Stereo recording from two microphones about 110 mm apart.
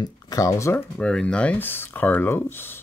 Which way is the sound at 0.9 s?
10° left (ahead or behind).